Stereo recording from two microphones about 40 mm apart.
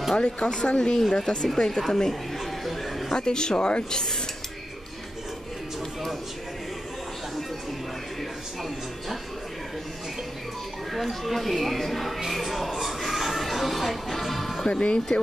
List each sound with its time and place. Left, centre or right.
0.2 s speech: left; by 2.1 s centre
2.3 s chatter: centre
3.2 s speech: centre
10.9 s speech: centre
12.7 s music: centre
14.7 s speech: left